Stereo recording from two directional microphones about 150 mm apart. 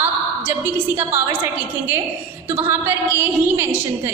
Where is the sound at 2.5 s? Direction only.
15° right (ahead or behind).